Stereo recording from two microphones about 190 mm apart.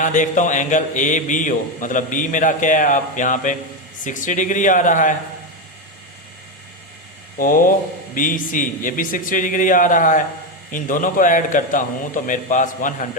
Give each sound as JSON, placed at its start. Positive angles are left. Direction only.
{"t": 0.0, "sound": "speech", "side_deg": 40}
{"t": 7.3, "sound": "speech", "side_deg": 45}